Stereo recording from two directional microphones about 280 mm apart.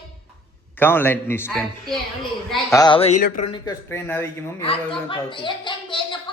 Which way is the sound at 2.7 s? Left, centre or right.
Centre.